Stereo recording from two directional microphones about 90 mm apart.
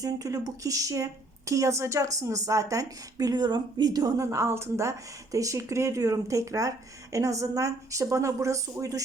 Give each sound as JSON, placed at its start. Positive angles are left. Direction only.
{"t": 0.0, "sound": "speech", "side_deg": -40}
{"t": 4.3, "sound": "speech", "side_deg": -30}